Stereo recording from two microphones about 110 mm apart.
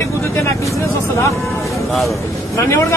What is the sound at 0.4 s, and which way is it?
Vehicle, 25° left (ahead or behind).